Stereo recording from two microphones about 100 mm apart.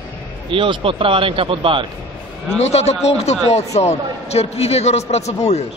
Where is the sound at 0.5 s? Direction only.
60° right (ahead or behind).